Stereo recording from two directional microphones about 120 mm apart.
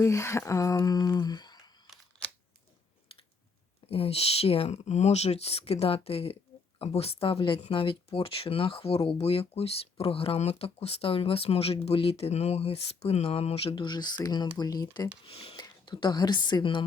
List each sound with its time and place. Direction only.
0.0 s speech: 25° left (ahead or behind)
3.8 s speech: 55° left (ahead or behind); by 15.1 s 30° left (ahead or behind)
15.2 s speech: 50° left (ahead or behind)
15.5 s a woman's voice: 40° left (ahead or behind)